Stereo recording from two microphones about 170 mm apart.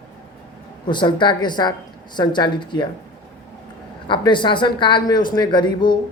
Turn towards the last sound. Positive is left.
turn(degrees=25)  # may be behind; listen again after turning